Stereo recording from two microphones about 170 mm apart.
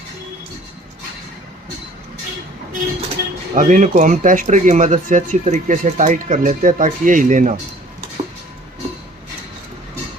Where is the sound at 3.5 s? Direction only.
50° right (ahead or behind).